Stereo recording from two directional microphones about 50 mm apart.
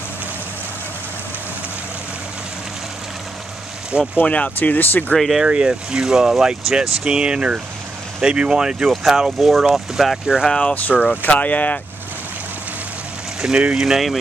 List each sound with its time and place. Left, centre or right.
3.9 s speech: right
4.3 s speech: left
5.5 s speech: centre
10.6 s speech: left
13.4 s speech: centre
13.7 s speech: centre